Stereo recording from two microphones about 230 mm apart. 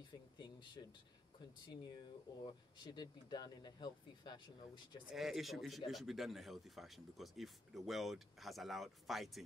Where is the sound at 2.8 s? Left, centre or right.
Centre.